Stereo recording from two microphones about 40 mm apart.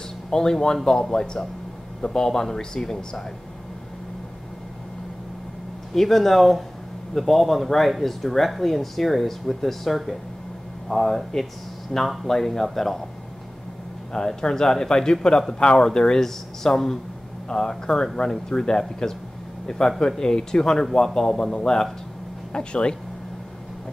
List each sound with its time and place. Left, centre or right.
0.3 s a man's voice: centre
5.9 s a man's voice: centre
14.1 s a man's voice: centre
22.5 s speech: left